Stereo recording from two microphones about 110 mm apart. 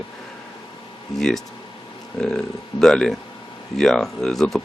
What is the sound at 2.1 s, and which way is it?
Speech, 5° left (ahead or behind).